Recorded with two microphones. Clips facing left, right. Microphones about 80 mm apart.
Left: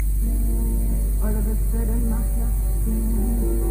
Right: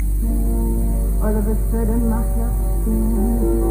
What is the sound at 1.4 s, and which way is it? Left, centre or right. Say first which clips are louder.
Music: right 7 dB; right.